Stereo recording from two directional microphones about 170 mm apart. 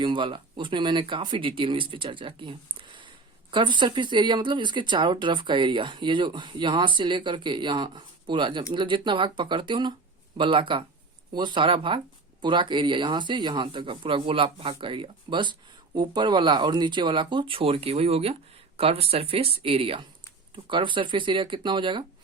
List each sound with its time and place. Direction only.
0.0 s speech: 30° right (ahead or behind)